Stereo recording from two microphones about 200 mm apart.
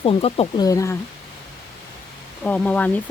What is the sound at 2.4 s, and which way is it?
Speech, 5° left (ahead or behind).